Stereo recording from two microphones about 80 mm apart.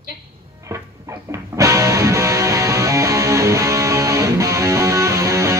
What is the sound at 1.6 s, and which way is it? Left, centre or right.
Music, right.